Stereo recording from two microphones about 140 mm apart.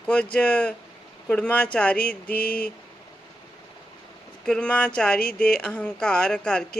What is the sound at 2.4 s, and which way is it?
Speech, 90° left.